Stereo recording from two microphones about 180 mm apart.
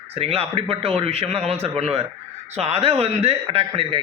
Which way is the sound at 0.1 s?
35° right (ahead or behind).